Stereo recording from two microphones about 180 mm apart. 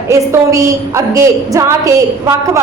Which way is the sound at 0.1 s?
15° right (ahead or behind).